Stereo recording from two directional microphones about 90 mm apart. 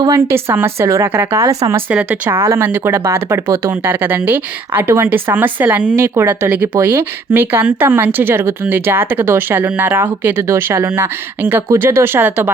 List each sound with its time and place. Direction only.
0.1 s speech: 30° right (ahead or behind)
1.4 s speech: 40° right (ahead or behind)
1.9 s speech: 15° right (ahead or behind)
6.0 s speech: 30° right (ahead or behind)